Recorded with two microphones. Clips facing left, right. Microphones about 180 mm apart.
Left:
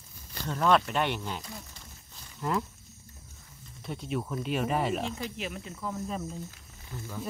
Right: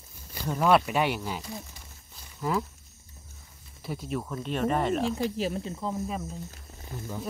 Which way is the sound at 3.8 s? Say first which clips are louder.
Right 1 dB; 5° right (ahead or behind).